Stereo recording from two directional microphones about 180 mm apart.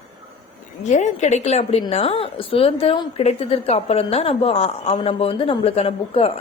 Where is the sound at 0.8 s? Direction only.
40° left (ahead or behind).